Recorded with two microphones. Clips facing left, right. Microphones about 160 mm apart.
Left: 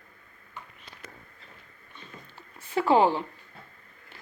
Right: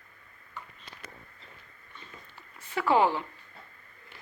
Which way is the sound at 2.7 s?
30° left (ahead or behind).